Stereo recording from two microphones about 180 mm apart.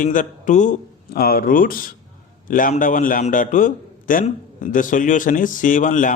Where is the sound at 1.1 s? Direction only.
55° left (ahead or behind).